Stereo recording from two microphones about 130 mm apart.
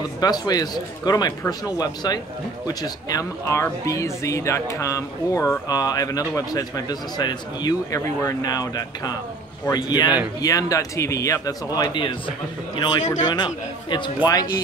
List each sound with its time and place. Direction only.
0.2 s a man's voice: 30° left (ahead or behind)